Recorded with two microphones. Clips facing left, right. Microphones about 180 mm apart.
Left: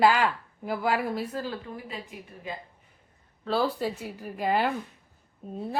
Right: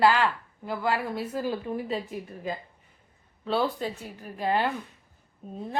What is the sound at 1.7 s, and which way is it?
Speech, 35° right (ahead or behind).